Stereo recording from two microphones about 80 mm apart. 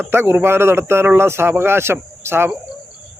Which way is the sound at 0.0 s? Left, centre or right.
Right.